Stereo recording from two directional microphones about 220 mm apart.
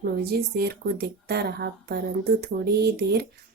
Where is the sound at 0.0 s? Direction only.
45° right (ahead or behind).